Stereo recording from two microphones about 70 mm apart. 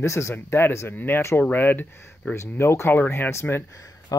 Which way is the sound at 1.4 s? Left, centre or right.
Left.